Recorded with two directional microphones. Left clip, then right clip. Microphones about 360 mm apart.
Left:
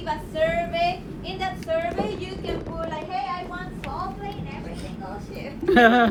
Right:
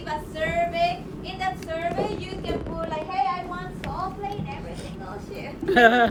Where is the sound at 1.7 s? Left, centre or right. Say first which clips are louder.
Left 6 dB; centre.